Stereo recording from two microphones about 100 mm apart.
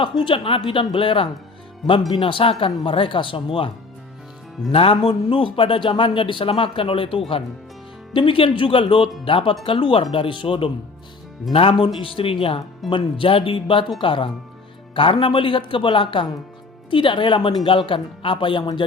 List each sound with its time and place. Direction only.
0.2 s speech: 60° left (ahead or behind)
4.7 s speech: 70° left (ahead or behind); by 18.9 s 50° left (ahead or behind)